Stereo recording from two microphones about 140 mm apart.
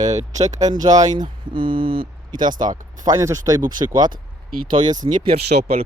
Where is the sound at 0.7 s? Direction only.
30° right (ahead or behind).